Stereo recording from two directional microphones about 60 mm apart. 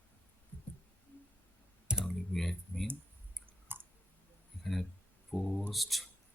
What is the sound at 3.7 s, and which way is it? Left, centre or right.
Clicking, right.